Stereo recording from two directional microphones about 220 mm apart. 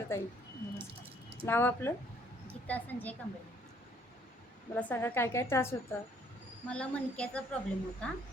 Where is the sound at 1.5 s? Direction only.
10° left (ahead or behind).